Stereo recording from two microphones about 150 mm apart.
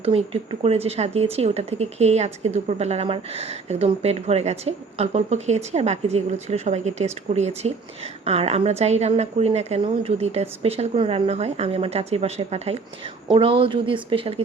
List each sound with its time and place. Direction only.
0.6 s speech: 40° right (ahead or behind)